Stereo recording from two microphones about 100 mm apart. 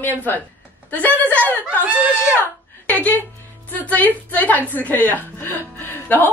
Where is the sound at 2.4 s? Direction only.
15° left (ahead or behind).